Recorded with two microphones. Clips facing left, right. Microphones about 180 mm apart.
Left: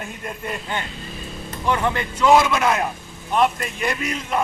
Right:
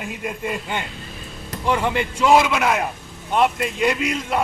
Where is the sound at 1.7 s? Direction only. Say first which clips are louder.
Right 1 dB; 10° right (ahead or behind).